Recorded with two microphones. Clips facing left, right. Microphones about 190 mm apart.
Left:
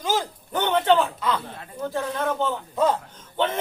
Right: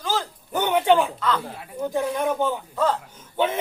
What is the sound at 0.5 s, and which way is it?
A man's voice, 10° right (ahead or behind).